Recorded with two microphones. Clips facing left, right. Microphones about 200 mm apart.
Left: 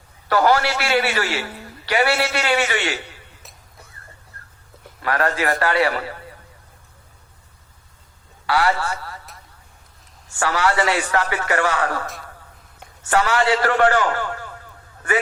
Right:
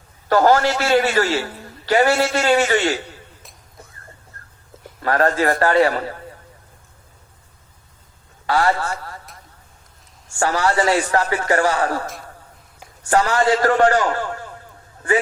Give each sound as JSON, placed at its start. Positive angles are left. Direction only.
{"t": 0.3, "sound": "a man's voice", "side_deg": -40}
{"t": 5.0, "sound": "a man's voice", "side_deg": -40}
{"t": 8.4, "sound": "a man's voice", "side_deg": -40}
{"t": 10.4, "sound": "a man's voice", "side_deg": -40}
{"t": 13.1, "sound": "a man's voice", "side_deg": -40}